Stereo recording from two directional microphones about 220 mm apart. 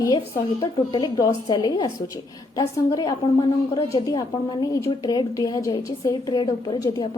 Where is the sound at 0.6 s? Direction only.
20° left (ahead or behind).